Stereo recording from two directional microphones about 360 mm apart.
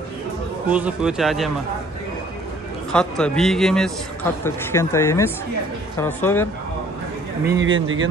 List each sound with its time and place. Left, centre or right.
0.7 s a man's voice: centre
2.9 s a man's voice: centre
7.4 s speech: right